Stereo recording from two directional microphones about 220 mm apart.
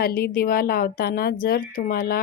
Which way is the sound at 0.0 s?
45° left (ahead or behind).